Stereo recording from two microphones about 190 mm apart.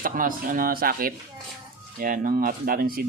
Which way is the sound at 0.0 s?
45° right (ahead or behind).